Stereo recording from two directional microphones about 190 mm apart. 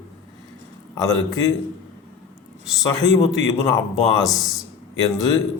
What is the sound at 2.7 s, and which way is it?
Speech, 20° left (ahead or behind).